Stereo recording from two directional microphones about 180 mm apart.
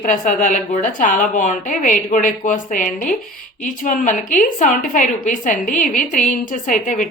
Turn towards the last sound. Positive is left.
turn(degrees=45)  # may be behind; listen again after turning